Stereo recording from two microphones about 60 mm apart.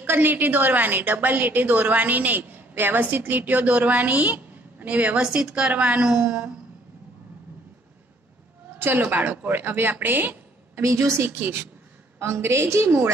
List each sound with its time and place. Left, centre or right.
0.0 s a woman's voice: right; by 6.5 s centre
8.7 s a sound: right
9.1 s speech: right
10.8 s a woman's voice: right